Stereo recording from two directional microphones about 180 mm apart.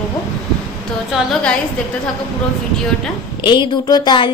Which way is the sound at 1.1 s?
Centre (ahead or behind).